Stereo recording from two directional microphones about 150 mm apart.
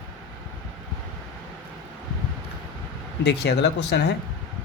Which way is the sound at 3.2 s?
90° left.